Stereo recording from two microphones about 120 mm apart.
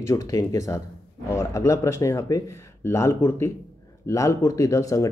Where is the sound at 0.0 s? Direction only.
30° left (ahead or behind).